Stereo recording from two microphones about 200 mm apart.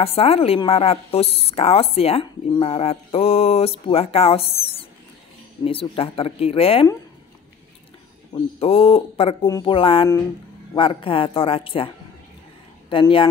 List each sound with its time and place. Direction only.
0.0 s a woman's voice: 30° left (ahead or behind)
5.6 s a woman's voice: 25° left (ahead or behind)
8.5 s a woman's voice: 30° left (ahead or behind)
12.9 s a woman's voice: 25° left (ahead or behind)